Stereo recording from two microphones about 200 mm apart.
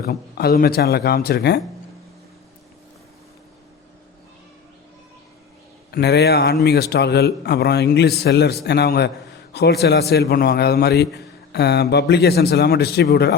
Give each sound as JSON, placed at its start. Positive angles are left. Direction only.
{"t": 0.0, "sound": "speech", "side_deg": 50}
{"t": 5.9, "sound": "a man's voice", "side_deg": 55}